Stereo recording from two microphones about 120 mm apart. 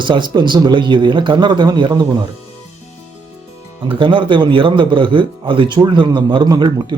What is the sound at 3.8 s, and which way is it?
A man's voice, 45° right (ahead or behind).